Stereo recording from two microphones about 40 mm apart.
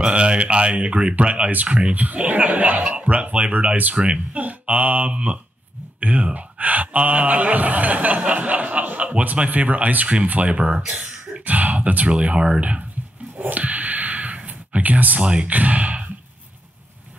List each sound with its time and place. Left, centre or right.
0.0 s speech: right
1.5 s a man's voice: right
3.9 s speech: right
4.4 s a sound: right
5.9 s a man's voice: right
12.1 s a man's voice: right
13.4 s a sound: right
13.7 s a sound: right
15.2 s speech: right